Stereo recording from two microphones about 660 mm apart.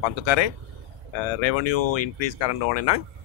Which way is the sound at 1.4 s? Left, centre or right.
Left.